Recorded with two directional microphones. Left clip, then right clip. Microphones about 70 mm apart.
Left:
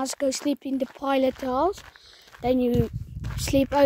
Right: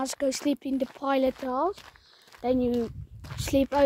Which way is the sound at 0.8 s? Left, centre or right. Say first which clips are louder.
Left 3 dB; left.